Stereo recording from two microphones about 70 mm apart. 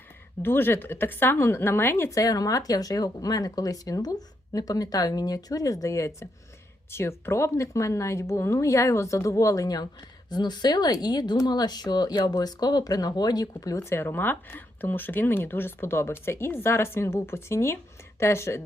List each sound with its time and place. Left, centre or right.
0.4 s speech: left
2.1 s speech: left
6.9 s speech: left
10.2 s speech: left
12.3 s speech: left
13.9 s speech: left